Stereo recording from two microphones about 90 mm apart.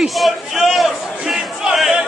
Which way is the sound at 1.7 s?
5° right (ahead or behind).